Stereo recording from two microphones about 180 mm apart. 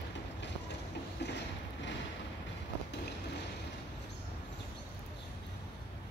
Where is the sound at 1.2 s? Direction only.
70° left (ahead or behind).